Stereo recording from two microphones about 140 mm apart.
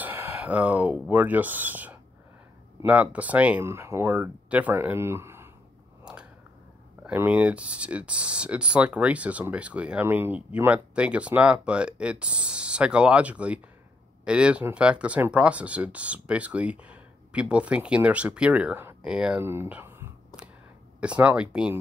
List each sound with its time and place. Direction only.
0.0 s speech: 15° right (ahead or behind)
7.1 s speech: 10° right (ahead or behind)
19.4 s speech: 15° right (ahead or behind)